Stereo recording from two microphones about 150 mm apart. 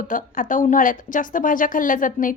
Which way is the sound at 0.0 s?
65° left (ahead or behind).